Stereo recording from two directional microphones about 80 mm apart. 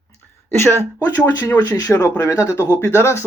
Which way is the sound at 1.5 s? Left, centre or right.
Left.